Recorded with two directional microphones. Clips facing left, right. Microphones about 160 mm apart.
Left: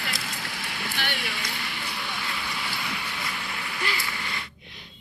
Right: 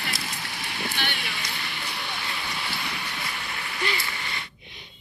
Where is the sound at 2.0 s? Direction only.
25° right (ahead or behind).